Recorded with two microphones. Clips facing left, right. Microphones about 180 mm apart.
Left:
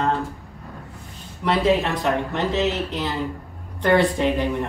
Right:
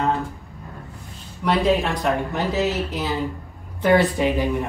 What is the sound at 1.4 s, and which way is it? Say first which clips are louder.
Speech: even; centre (ahead or behind).